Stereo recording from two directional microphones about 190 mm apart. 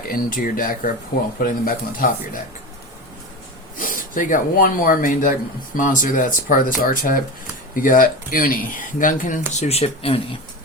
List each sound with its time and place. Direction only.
0.1 s speech: 45° left (ahead or behind)
3.8 s speech: 45° left (ahead or behind)